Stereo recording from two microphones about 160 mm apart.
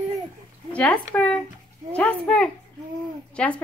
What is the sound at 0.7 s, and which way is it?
Speech, 10° left (ahead or behind).